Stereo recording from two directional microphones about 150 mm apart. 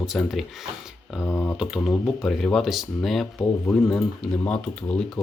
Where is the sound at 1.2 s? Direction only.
20° left (ahead or behind).